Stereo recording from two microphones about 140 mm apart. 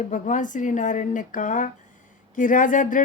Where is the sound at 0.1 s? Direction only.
65° left (ahead or behind).